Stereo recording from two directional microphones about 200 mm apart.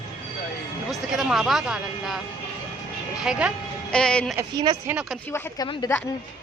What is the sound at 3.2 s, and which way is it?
Speech, 5° right (ahead or behind).